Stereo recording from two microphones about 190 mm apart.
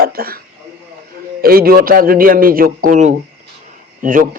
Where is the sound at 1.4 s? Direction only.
50° right (ahead or behind).